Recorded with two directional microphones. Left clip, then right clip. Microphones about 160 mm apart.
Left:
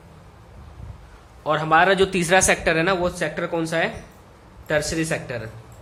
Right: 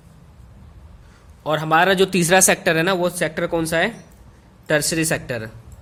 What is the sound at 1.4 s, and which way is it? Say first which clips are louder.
Speech: even; 45° right (ahead or behind).